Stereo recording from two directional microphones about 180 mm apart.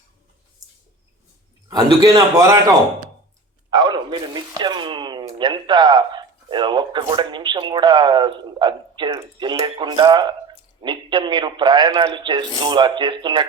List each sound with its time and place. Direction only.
1.6 s speech: 20° right (ahead or behind)
3.7 s speech: 25° right (ahead or behind)